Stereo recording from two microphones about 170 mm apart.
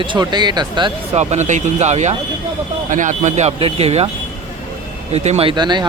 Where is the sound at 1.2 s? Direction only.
40° right (ahead or behind).